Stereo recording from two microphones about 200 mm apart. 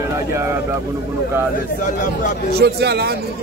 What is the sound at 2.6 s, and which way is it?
Speech, 55° right (ahead or behind).